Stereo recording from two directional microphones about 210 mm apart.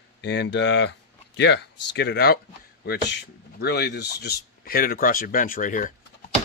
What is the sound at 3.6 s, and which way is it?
Speech, 50° left (ahead or behind).